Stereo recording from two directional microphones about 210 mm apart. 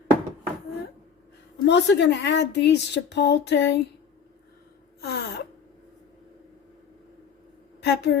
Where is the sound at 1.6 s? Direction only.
55° left (ahead or behind).